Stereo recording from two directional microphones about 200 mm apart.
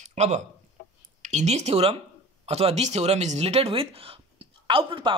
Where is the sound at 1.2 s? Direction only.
35° right (ahead or behind).